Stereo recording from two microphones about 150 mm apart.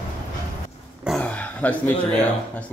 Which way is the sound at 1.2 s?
10° left (ahead or behind).